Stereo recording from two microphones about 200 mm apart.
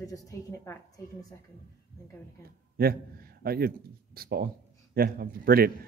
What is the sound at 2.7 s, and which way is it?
A man's voice, 50° right (ahead or behind).